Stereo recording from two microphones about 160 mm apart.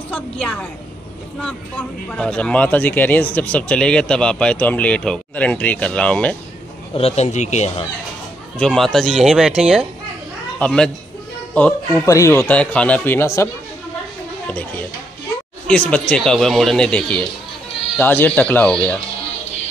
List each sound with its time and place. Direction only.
0.1 s speech: 5° left (ahead or behind)
1.8 s speech: 5° left (ahead or behind)
7.0 s speech: 40° left (ahead or behind)
8.5 s speech: 5° left (ahead or behind)
14.5 s speech: 10° left (ahead or behind)